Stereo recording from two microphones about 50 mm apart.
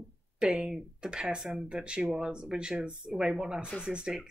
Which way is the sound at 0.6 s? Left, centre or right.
Centre.